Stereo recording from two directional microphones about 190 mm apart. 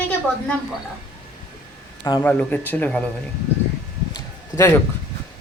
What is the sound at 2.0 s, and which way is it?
Speech, 20° left (ahead or behind).